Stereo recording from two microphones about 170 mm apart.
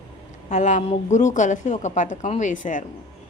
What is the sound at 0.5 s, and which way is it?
A woman's voice, 45° left (ahead or behind).